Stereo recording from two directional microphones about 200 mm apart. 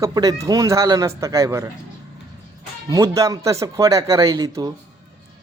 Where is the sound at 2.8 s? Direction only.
15° right (ahead or behind).